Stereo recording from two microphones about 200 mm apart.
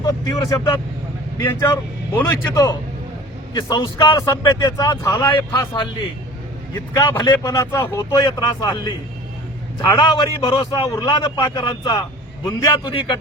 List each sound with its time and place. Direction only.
0.0 s a man's voice: 20° left (ahead or behind)
7.3 s a man's voice: 20° left (ahead or behind)